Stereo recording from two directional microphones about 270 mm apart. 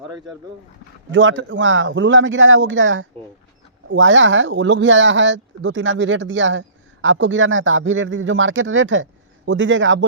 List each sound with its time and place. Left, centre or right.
1.1 s speech: right